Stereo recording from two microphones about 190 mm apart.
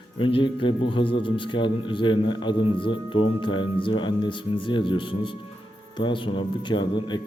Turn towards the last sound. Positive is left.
turn(degrees=25)  # may be behind; listen again after turning